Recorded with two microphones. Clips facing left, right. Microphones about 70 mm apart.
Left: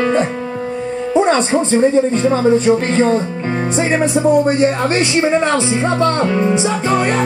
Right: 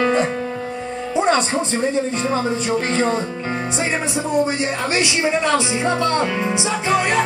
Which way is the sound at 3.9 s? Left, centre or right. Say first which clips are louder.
Left 12 dB; left.